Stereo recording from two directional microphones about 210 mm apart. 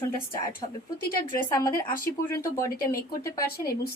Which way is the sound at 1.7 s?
40° left (ahead or behind).